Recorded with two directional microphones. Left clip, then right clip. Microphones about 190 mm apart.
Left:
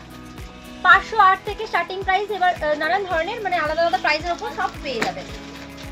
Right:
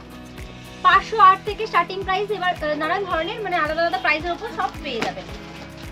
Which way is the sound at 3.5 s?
10° right (ahead or behind).